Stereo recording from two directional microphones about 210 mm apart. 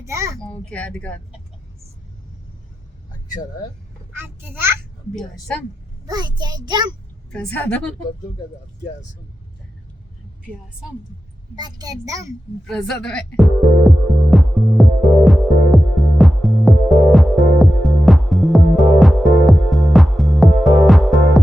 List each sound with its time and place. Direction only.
0.0 s a sound: 15° right (ahead or behind)
0.3 s a child's voice: 5° left (ahead or behind)
4.2 s a child's voice: 10° right (ahead or behind)
6.1 s a child's voice: 20° right (ahead or behind)
7.3 s speech: 5° left (ahead or behind)
11.5 s a child's voice: 20° right (ahead or behind)
12.6 s music: 5° left (ahead or behind)